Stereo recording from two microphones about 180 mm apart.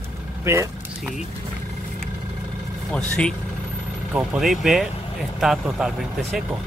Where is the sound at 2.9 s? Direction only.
5° left (ahead or behind).